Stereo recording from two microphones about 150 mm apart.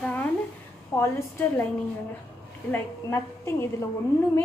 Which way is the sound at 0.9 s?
20° left (ahead or behind).